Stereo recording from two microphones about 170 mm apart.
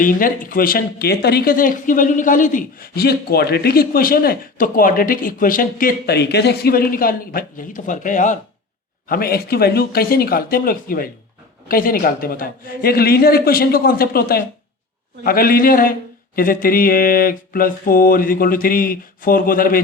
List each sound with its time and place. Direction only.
0.0 s speech: 55° left (ahead or behind)
9.0 s speech: 60° left (ahead or behind)